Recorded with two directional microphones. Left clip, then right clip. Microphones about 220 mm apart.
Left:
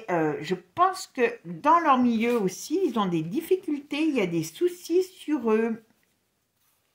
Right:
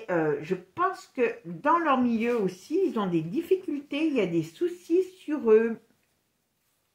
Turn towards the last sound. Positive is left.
turn(degrees=45)  # may be behind; listen again after turning